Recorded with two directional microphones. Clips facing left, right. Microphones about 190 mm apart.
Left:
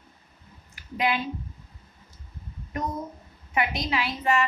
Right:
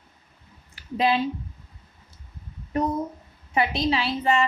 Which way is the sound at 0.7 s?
30° right (ahead or behind).